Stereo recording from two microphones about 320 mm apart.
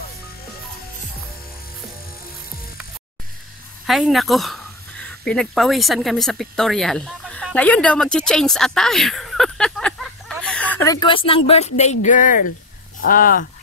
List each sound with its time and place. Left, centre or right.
3.8 s speech: centre; by 13.5 s left